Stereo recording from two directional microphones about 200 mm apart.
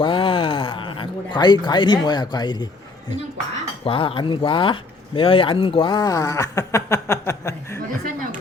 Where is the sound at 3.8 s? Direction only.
25° left (ahead or behind).